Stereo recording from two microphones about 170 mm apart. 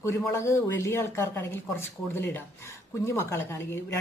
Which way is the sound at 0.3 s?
15° left (ahead or behind).